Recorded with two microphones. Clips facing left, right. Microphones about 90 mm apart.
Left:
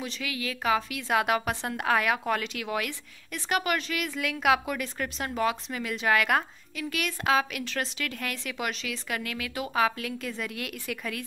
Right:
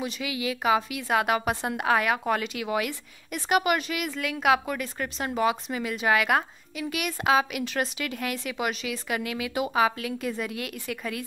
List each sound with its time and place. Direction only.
0.0 s a woman's voice: 10° right (ahead or behind)